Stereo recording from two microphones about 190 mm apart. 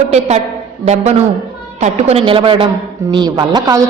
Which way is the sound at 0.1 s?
35° right (ahead or behind).